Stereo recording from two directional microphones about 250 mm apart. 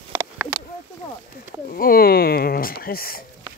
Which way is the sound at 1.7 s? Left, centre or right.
Left.